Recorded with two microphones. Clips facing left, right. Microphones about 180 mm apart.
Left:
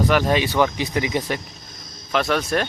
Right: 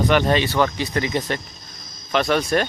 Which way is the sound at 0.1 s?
5° left (ahead or behind).